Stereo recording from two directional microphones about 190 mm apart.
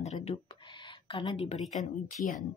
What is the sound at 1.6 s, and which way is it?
Speech, 40° left (ahead or behind).